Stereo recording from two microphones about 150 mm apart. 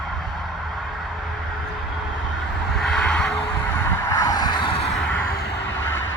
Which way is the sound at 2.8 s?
5° left (ahead or behind).